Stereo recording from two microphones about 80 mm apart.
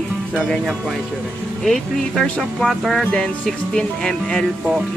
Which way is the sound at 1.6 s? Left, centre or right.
Centre.